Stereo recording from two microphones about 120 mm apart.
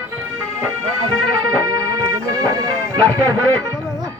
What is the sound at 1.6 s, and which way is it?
Music, 30° right (ahead or behind).